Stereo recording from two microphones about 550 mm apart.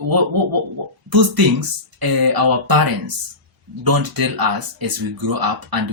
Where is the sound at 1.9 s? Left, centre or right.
Right.